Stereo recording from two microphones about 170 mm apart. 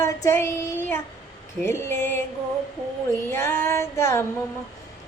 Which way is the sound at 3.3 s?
15° left (ahead or behind).